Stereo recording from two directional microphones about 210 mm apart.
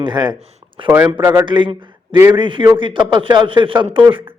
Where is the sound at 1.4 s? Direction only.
20° right (ahead or behind).